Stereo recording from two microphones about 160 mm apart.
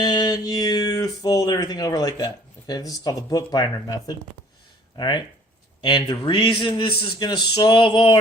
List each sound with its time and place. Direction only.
0.0 s speech: 25° left (ahead or behind)